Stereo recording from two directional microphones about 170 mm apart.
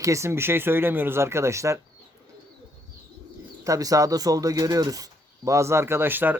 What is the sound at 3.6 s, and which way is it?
Speech, 20° right (ahead or behind).